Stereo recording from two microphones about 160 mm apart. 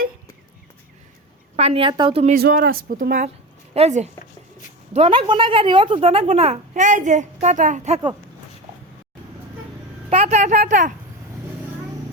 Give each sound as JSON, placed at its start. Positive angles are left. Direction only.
{"t": 1.5, "sound": "a woman's voice", "side_deg": -40}
{"t": 2.3, "sound": "speech", "side_deg": -65}
{"t": 3.8, "sound": "speech", "side_deg": -45}
{"t": 10.1, "sound": "speech", "side_deg": -40}